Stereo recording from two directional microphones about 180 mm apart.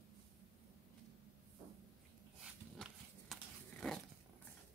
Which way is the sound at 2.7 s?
Centre (ahead or behind).